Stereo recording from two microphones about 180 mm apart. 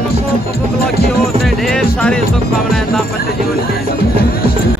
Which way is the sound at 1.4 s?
Centre (ahead or behind).